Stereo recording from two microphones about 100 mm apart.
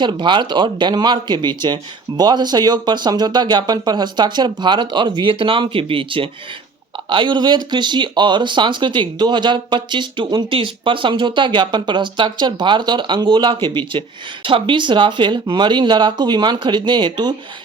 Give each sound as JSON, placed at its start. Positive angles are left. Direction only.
{"t": 0.0, "sound": "speech", "side_deg": -50}